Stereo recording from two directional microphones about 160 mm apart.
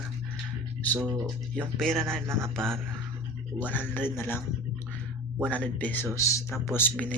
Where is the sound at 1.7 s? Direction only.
Centre (ahead or behind).